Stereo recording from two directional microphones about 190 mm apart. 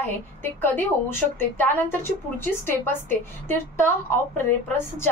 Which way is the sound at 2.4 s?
10° left (ahead or behind).